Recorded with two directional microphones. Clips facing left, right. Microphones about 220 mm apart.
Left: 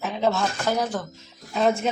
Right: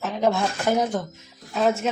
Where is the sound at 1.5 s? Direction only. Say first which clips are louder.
Even; centre (ahead or behind).